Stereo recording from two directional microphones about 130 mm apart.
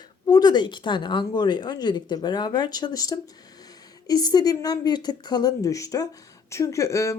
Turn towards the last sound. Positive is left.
turn(degrees=25)  # may be behind; listen again after turning